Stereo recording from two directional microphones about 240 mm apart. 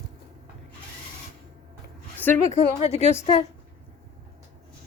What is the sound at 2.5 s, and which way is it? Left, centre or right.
Speech, left.